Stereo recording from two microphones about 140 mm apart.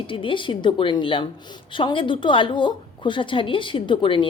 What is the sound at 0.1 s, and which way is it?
A woman's voice, 40° left (ahead or behind).